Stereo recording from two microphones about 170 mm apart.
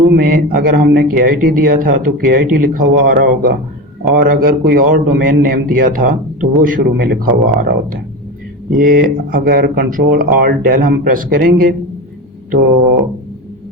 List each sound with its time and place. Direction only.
0.2 s a man's voice: 60° right (ahead or behind)
8.7 s a man's voice: 55° right (ahead or behind)